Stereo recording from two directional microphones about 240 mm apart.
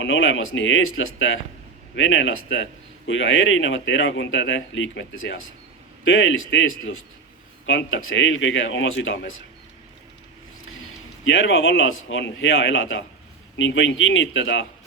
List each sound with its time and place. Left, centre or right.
0.0 s speech: left
11.3 s speech: left